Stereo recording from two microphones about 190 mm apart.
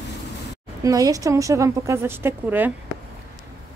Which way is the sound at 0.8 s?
20° right (ahead or behind).